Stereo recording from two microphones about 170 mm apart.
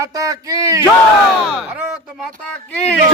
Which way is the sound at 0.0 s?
20° right (ahead or behind).